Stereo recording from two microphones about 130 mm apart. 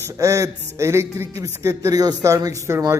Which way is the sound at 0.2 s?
25° right (ahead or behind).